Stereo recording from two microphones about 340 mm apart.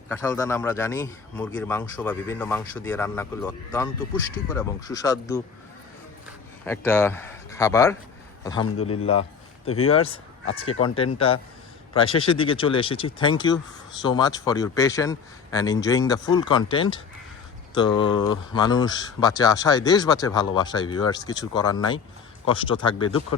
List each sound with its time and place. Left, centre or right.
0.1 s speech: centre
6.7 s speech: centre
9.8 s speech: centre
10.4 s speech: left
10.8 s speech: centre